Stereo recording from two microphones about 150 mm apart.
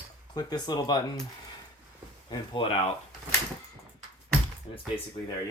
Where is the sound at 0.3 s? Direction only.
25° left (ahead or behind).